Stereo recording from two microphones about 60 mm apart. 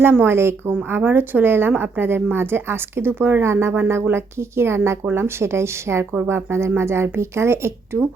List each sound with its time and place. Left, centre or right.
0.0 s speech: right